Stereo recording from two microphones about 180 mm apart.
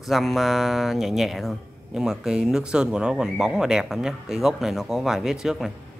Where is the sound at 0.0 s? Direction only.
Centre (ahead or behind).